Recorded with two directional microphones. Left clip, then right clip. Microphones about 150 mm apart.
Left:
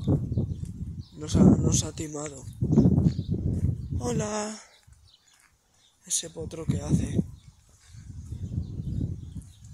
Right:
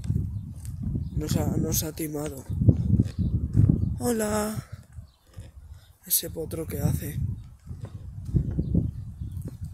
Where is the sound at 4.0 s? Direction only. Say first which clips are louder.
Right 2 dB; 30° right (ahead or behind).